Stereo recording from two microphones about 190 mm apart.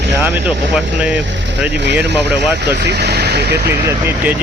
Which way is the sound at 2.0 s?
65° right (ahead or behind).